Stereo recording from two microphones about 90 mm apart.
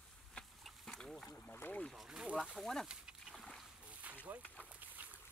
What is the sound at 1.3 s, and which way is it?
Boat, 20° left (ahead or behind).